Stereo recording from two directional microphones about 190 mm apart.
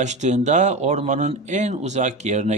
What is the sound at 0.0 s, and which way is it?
Speech, 40° right (ahead or behind).